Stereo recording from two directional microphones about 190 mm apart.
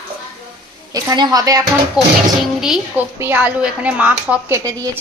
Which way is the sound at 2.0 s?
5° right (ahead or behind).